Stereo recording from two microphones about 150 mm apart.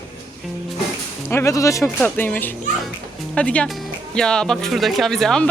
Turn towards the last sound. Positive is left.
turn(degrees=5)  # may be behind; listen again after turning